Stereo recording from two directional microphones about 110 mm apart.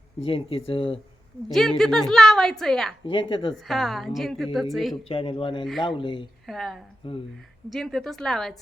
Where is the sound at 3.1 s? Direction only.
55° left (ahead or behind).